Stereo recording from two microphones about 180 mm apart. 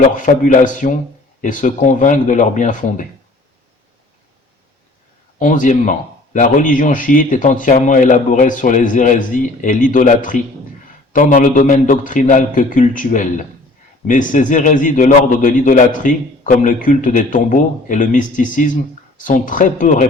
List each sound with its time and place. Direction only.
0.1 s a man's voice: 45° left (ahead or behind)
5.4 s a man's voice: 45° left (ahead or behind)